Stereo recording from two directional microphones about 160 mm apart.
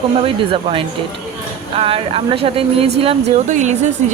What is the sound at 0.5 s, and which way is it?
Speech, 35° right (ahead or behind).